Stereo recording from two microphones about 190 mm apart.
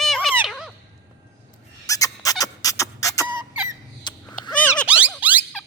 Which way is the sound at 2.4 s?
20° left (ahead or behind).